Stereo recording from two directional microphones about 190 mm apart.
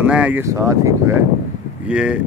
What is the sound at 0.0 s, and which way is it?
Speech, 5° right (ahead or behind).